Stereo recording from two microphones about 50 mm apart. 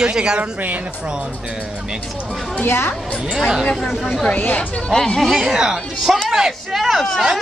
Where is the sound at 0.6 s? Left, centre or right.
Right.